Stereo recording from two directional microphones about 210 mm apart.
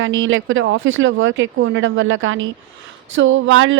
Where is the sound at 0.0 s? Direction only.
70° right (ahead or behind).